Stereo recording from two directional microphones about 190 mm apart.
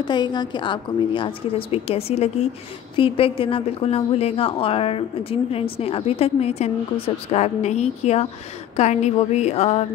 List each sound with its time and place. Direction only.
0.0 s a woman's voice: 25° left (ahead or behind)